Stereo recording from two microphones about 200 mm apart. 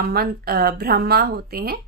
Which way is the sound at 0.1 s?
50° right (ahead or behind).